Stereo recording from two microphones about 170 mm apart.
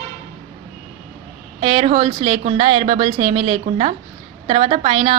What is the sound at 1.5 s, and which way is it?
A woman's voice, 35° right (ahead or behind).